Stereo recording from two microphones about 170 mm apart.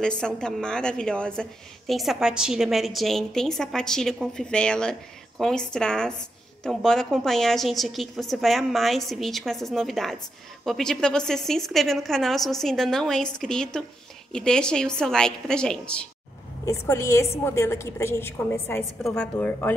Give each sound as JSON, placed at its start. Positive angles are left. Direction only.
{"t": 0.0, "sound": "a woman's voice", "side_deg": 5}
{"t": 16.6, "sound": "a woman's voice", "side_deg": 15}